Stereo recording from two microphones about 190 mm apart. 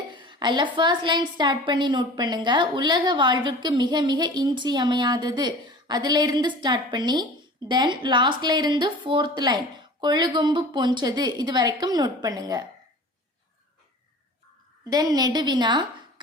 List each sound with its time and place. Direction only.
0.1 s a woman's voice: 25° right (ahead or behind)
14.8 s a woman's voice: 20° right (ahead or behind)